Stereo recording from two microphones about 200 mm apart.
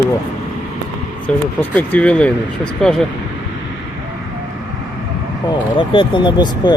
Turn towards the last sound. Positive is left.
turn(degrees=20)  # may be behind; listen again after turning